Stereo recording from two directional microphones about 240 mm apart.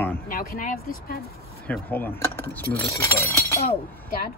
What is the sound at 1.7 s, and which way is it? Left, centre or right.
Speech, centre.